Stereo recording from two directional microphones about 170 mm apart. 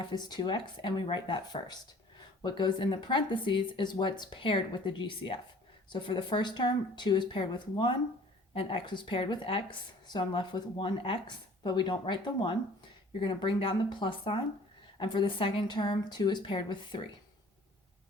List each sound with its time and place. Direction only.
0.0 s speech: 25° left (ahead or behind)